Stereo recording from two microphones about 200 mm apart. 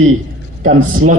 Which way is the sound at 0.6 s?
40° right (ahead or behind).